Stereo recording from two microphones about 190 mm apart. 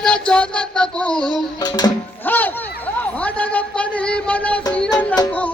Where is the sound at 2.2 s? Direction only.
10° left (ahead or behind).